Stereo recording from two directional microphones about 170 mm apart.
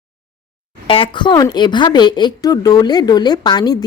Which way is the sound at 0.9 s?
30° left (ahead or behind).